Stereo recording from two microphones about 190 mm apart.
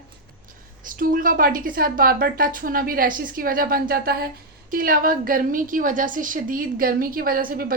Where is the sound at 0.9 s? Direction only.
45° right (ahead or behind).